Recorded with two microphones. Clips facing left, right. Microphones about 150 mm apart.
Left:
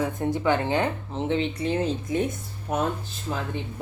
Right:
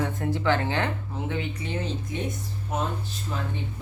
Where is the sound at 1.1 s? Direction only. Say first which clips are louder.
Left 5 dB; 25° left (ahead or behind).